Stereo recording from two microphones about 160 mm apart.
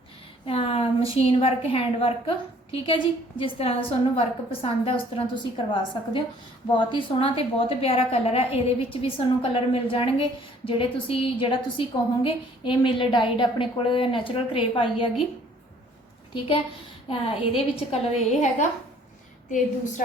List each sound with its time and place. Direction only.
0.4 s a woman's voice: 35° left (ahead or behind)
17.1 s a woman's voice: 35° left (ahead or behind); by 19.9 s 50° left (ahead or behind)